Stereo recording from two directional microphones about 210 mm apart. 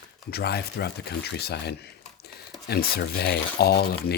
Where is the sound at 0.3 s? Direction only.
50° left (ahead or behind).